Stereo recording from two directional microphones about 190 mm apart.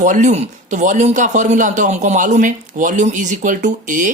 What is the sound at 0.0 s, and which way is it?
Speech, 40° right (ahead or behind).